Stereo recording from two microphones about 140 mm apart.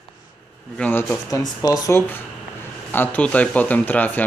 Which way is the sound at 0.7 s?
10° left (ahead or behind).